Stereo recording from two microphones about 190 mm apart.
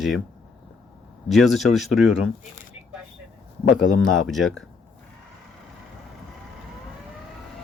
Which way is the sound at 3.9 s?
90° left.